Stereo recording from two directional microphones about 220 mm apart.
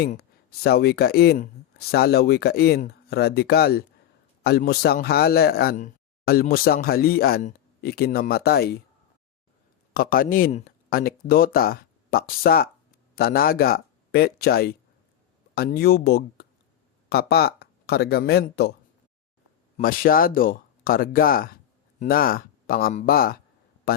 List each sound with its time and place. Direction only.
0.0 s speech: 45° left (ahead or behind)
9.9 s speech: 40° left (ahead or behind)
19.7 s speech: 40° left (ahead or behind)